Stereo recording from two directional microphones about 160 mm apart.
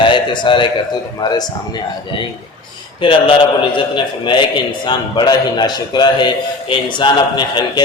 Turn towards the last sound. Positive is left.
turn(degrees=30)  # may be behind; listen again after turning